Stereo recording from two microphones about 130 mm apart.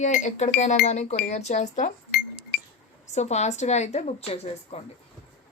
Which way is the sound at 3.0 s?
60° left (ahead or behind).